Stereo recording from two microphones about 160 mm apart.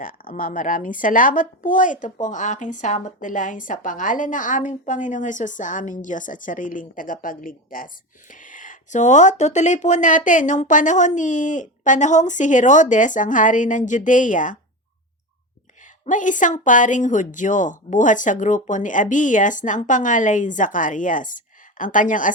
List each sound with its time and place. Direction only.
0.0 s speech: 60° left (ahead or behind)
16.0 s speech: 50° left (ahead or behind)